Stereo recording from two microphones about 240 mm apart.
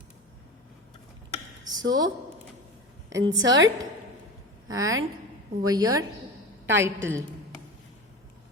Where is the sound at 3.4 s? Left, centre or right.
Right.